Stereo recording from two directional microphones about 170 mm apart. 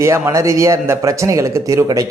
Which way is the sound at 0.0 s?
15° right (ahead or behind).